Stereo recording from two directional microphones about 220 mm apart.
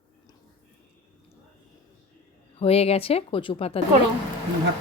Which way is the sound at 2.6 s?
25° left (ahead or behind).